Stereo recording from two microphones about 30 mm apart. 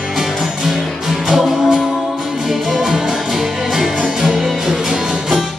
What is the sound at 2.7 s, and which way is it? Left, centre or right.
Music, right.